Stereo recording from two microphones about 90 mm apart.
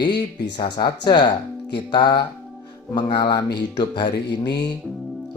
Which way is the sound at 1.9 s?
60° left (ahead or behind).